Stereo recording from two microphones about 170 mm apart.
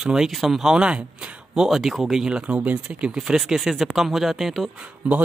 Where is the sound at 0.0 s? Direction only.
5° right (ahead or behind).